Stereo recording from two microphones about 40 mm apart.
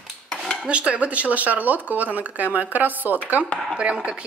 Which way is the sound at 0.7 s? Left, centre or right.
Right.